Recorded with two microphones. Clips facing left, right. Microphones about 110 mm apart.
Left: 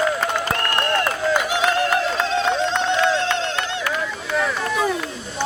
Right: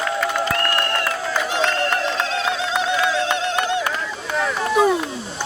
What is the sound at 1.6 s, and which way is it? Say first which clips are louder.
Music: left 1 dB; centre (ahead or behind).